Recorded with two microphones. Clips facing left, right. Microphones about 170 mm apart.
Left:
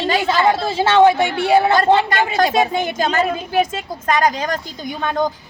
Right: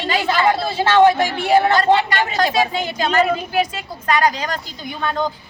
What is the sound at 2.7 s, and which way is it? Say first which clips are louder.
Speech: left 3 dB; 45° left (ahead or behind).